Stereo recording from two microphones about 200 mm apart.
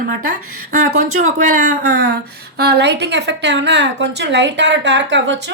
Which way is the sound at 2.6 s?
55° right (ahead or behind).